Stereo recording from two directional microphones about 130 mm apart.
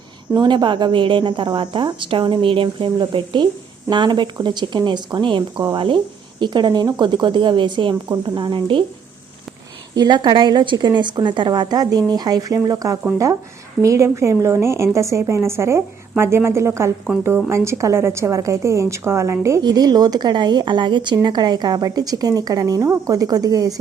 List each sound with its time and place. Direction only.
0.3 s a woman's voice: 35° right (ahead or behind)
9.9 s a woman's voice: 35° right (ahead or behind)